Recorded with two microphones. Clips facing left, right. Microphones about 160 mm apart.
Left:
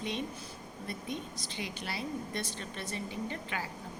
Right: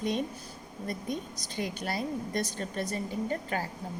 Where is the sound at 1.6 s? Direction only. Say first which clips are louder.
Right 7 dB; 45° right (ahead or behind).